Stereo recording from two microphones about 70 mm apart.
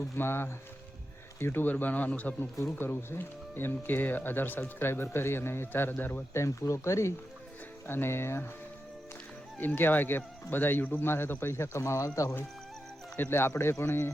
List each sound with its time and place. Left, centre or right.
0.2 s speech: left
2.7 s speech: left
6.4 s speech: left
7.9 s speech: left
9.6 s speech: left
13.1 s speech: left